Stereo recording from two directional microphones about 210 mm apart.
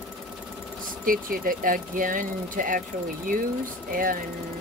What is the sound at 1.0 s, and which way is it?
Speech, 40° right (ahead or behind).